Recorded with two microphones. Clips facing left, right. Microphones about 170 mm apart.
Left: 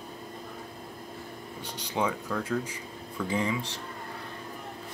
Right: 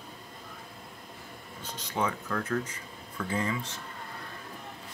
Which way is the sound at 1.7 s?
10° left (ahead or behind).